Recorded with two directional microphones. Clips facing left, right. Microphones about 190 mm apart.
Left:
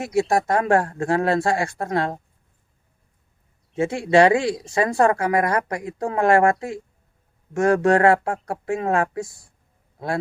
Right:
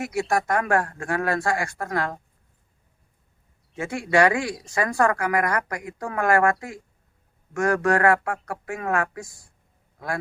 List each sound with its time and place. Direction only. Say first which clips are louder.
0.0 s speech: left 4 dB; 25° left (ahead or behind)
3.8 s speech: left 5 dB; 25° left (ahead or behind)